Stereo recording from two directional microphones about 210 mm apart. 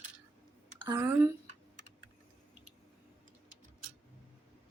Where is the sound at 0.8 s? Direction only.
15° right (ahead or behind).